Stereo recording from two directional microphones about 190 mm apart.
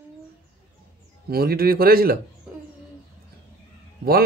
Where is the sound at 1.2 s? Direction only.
55° right (ahead or behind).